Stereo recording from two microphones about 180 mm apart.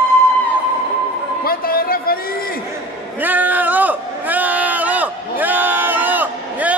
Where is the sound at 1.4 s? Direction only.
55° left (ahead or behind).